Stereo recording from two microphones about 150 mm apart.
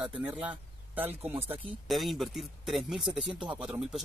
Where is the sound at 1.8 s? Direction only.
Centre (ahead or behind).